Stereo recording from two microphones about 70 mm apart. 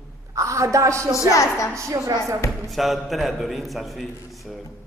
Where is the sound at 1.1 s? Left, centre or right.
Left.